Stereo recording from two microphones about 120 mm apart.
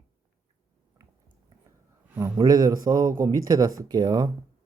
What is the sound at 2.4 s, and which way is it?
A man's voice, 30° right (ahead or behind).